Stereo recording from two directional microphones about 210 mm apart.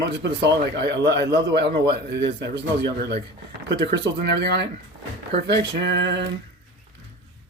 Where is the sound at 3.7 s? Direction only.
55° right (ahead or behind).